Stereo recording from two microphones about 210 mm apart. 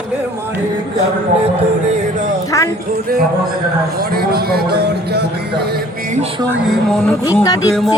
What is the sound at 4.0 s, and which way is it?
Speech, 45° right (ahead or behind).